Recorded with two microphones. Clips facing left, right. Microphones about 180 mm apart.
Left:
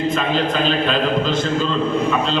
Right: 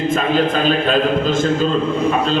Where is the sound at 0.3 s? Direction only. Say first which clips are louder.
Right 3 dB; 45° right (ahead or behind).